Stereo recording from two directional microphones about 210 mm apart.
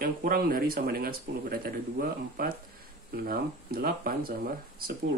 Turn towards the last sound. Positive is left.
turn(degrees=-45)  # may be behind; listen again after turning